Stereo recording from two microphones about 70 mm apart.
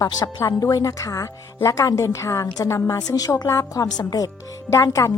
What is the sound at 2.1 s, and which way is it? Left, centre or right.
A woman's voice, left.